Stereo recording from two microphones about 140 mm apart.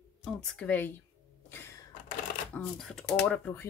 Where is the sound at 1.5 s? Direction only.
15° left (ahead or behind).